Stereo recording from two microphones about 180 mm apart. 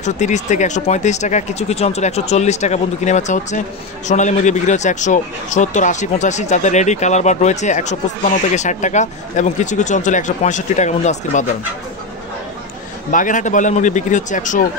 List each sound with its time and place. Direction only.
0.0 s speech: 40° left (ahead or behind)
13.1 s speech: 45° left (ahead or behind)